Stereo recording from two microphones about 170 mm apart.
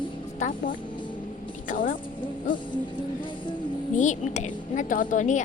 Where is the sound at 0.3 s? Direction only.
50° left (ahead or behind).